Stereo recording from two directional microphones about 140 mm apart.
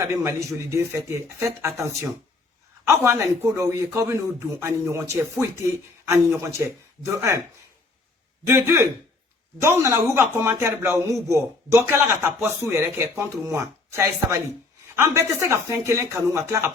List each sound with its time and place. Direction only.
0.0 s a man's voice: 20° right (ahead or behind)
2.8 s a man's voice: 20° right (ahead or behind)
8.4 s a man's voice: 15° right (ahead or behind)